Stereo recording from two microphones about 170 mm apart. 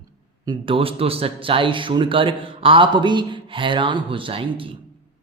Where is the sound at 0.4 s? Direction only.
30° right (ahead or behind).